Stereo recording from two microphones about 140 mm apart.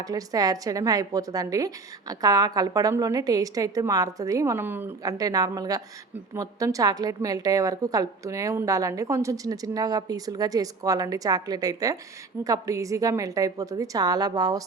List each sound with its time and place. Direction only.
0.0 s a woman's voice: 25° right (ahead or behind)
5.0 s a woman's voice: 25° right (ahead or behind)